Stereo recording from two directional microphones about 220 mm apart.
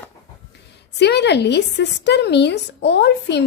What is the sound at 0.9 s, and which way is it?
A woman's voice, 50° left (ahead or behind).